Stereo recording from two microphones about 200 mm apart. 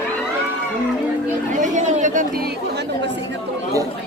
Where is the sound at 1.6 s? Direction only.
40° right (ahead or behind).